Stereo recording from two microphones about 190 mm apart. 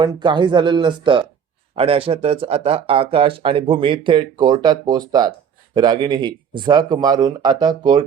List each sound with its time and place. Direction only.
0.0 s speech: 25° right (ahead or behind)